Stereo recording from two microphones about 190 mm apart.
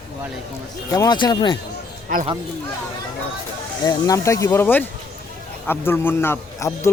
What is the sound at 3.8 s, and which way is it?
Speech, 20° left (ahead or behind).